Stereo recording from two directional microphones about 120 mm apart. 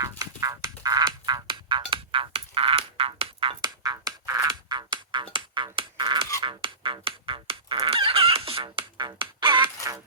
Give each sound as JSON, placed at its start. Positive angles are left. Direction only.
{"t": 0.0, "sound": "music", "side_deg": -30}
{"t": 3.6, "sound": "music", "side_deg": -30}
{"t": 6.4, "sound": "fowl", "side_deg": -45}
{"t": 9.9, "sound": "music", "side_deg": -30}